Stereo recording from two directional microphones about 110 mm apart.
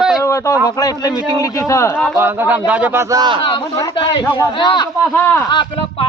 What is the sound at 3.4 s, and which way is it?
Speech, 55° left (ahead or behind).